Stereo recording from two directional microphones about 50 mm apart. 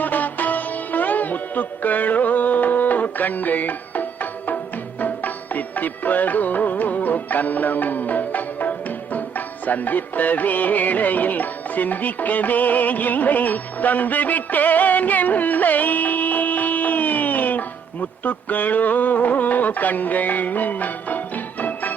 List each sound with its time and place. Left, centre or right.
0.0 s sitar: left
4.9 s music: left